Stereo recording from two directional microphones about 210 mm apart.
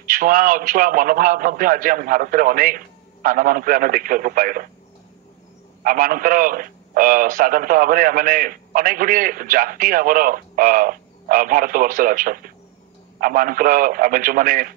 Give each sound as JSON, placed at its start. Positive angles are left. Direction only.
{"t": 0.0, "sound": "a man's voice", "side_deg": -40}
{"t": 5.9, "sound": "a man's voice", "side_deg": -40}